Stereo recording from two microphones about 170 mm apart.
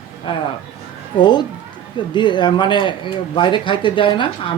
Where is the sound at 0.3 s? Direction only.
30° left (ahead or behind).